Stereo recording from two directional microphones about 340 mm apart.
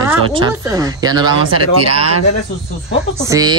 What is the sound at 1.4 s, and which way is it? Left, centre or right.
Speech, right.